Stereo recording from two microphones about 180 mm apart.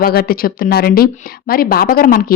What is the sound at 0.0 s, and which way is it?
Speech, 55° left (ahead or behind).